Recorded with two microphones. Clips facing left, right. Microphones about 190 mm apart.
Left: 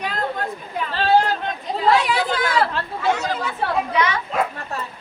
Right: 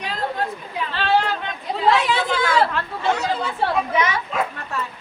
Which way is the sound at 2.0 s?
25° right (ahead or behind).